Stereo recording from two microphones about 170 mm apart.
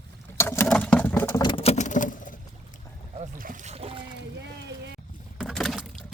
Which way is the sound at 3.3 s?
55° right (ahead or behind).